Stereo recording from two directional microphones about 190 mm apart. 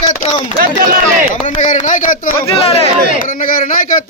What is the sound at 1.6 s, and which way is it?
Speech, 40° left (ahead or behind).